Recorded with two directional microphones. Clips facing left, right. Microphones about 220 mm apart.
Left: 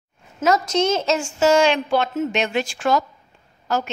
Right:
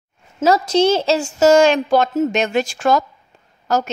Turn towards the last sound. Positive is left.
turn(degrees=-45)  # may be behind; listen again after turning